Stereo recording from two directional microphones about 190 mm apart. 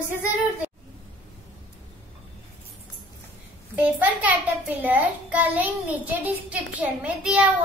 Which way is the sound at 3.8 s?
10° right (ahead or behind).